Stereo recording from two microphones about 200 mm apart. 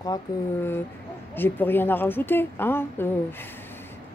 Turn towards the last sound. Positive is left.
turn(degrees=10)  # may be behind; listen again after turning